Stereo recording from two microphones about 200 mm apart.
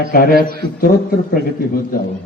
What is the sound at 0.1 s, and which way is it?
A man's voice, 45° left (ahead or behind).